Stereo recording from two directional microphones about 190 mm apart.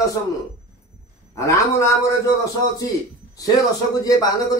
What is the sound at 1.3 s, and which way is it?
Speech, 15° left (ahead or behind).